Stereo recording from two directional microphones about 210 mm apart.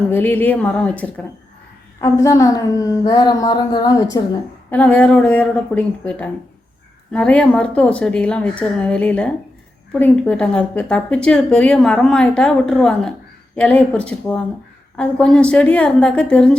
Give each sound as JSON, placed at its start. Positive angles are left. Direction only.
{"t": 0.1, "sound": "a woman's voice", "side_deg": 10}